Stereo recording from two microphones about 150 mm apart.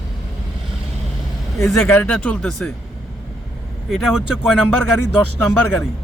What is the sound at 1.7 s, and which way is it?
Speech, 10° left (ahead or behind).